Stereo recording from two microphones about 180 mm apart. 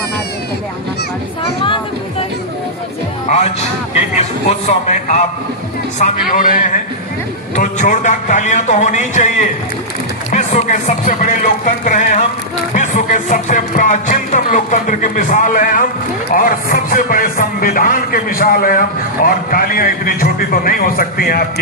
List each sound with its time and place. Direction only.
1.6 s a sound: 30° left (ahead or behind)
3.2 s speech: 40° left (ahead or behind)
6.0 s music: 45° left (ahead or behind)
10.3 s music: 40° left (ahead or behind)